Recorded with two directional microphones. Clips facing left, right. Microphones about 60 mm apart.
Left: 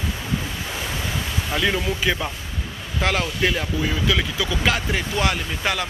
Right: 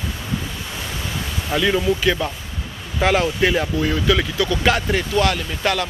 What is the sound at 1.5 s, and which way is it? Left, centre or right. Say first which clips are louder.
Speech: right 5 dB; centre.